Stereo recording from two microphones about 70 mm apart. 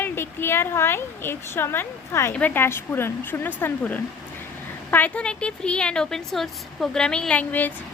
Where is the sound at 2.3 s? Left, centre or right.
Left.